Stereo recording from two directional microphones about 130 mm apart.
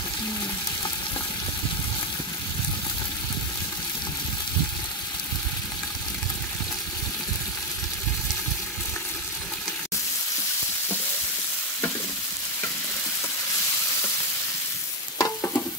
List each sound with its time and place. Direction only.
15.1 s stir: 25° left (ahead or behind)